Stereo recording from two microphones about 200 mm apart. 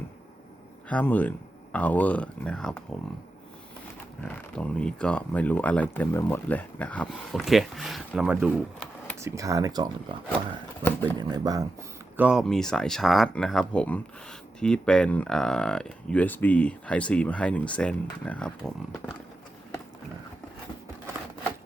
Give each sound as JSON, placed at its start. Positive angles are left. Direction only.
{"t": 0.9, "sound": "speech", "side_deg": 5}
{"t": 4.2, "sound": "speech", "side_deg": 5}
{"t": 11.2, "sound": "speech", "side_deg": -20}
{"t": 12.1, "sound": "speech", "side_deg": -5}